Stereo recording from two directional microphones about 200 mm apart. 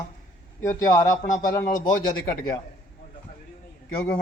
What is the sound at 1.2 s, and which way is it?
Speech, 40° left (ahead or behind).